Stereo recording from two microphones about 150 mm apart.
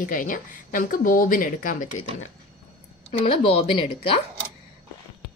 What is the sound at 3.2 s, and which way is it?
Speech, 40° left (ahead or behind).